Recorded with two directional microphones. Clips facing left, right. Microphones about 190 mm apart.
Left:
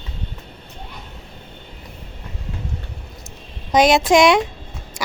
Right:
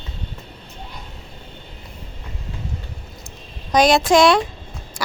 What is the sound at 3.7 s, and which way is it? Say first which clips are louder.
Speech: left 1 dB; 20° left (ahead or behind).